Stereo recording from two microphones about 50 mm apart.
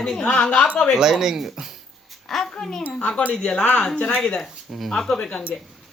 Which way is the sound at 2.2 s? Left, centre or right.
Centre.